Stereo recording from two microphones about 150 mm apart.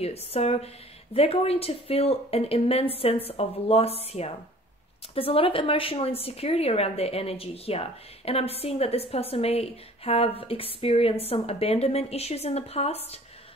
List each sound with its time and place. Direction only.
0.0 s a woman's voice: 45° left (ahead or behind)